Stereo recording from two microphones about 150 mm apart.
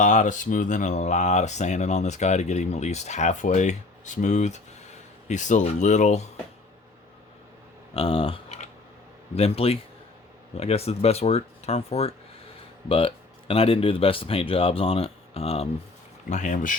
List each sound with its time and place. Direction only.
0.0 s speech: 55° left (ahead or behind)
7.9 s speech: 40° left (ahead or behind)
16.3 s speech: 60° left (ahead or behind)